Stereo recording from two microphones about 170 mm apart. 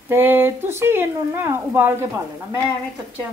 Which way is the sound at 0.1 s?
10° right (ahead or behind).